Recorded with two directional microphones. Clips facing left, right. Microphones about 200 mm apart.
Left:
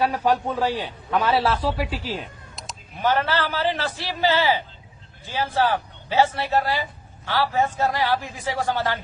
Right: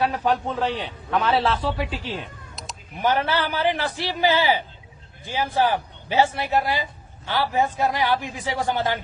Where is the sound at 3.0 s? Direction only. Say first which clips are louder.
Even; 15° right (ahead or behind).